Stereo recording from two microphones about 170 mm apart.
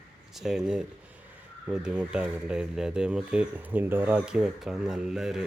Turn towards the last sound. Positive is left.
turn(degrees=-5)  # may be behind; listen again after turning